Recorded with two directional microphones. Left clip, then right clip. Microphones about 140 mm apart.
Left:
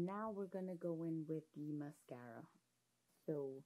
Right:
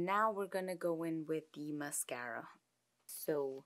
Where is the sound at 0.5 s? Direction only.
20° right (ahead or behind).